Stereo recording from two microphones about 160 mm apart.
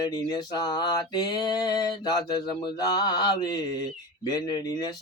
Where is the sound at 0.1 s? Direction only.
25° left (ahead or behind).